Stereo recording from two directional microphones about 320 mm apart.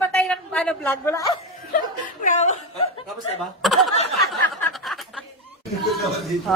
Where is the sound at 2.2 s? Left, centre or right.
Left.